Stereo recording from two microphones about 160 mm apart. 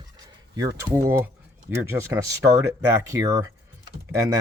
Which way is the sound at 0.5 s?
25° right (ahead or behind).